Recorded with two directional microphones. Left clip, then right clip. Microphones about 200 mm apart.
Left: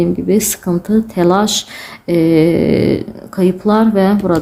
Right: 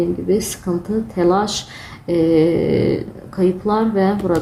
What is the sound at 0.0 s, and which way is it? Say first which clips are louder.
Speech: left 4 dB; 40° left (ahead or behind).